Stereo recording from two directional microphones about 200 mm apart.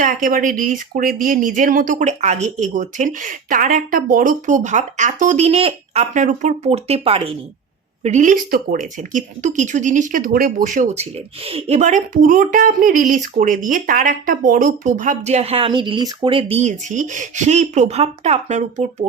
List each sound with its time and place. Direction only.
0.0 s speech: 40° right (ahead or behind)
11.4 s speech: 30° right (ahead or behind)